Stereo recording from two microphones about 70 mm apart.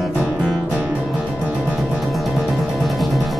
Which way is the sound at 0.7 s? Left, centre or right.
Right.